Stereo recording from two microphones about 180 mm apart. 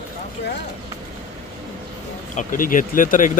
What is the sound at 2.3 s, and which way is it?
Speech, 45° left (ahead or behind).